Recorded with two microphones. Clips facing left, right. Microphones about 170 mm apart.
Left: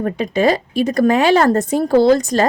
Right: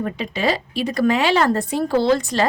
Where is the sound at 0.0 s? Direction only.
45° left (ahead or behind).